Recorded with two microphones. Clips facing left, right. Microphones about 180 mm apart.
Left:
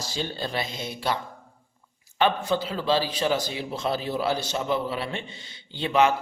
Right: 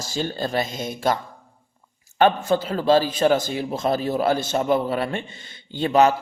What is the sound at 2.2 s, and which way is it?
Speech, 45° right (ahead or behind).